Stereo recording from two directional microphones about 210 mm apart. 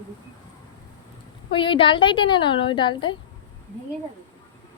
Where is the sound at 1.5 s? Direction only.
25° left (ahead or behind).